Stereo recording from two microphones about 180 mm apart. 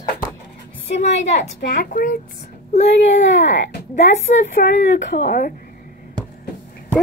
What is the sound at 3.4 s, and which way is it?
A woman's voice, 40° left (ahead or behind).